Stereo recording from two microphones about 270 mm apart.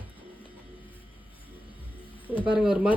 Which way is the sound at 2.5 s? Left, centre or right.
Centre.